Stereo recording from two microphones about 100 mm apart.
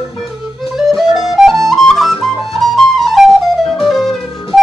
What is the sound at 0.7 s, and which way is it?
Music, centre (ahead or behind).